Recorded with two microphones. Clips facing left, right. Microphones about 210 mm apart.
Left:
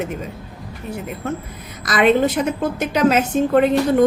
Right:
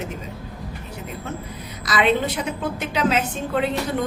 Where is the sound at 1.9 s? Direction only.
50° left (ahead or behind).